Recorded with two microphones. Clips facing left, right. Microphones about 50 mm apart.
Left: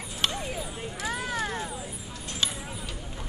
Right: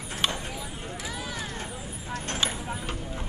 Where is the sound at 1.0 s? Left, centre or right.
Left.